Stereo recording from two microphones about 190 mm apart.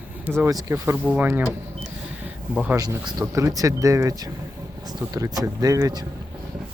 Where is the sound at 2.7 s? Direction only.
20° right (ahead or behind).